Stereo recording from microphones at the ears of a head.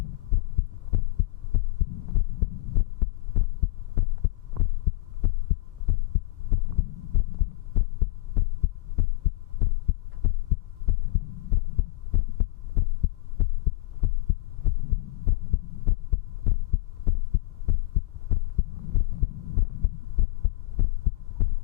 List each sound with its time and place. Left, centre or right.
0.0 s heart sounds: left